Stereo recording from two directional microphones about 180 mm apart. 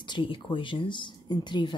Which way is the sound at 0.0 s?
25° left (ahead or behind).